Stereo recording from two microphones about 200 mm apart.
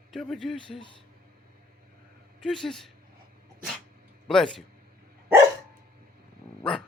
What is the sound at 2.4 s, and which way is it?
Speech, centre (ahead or behind).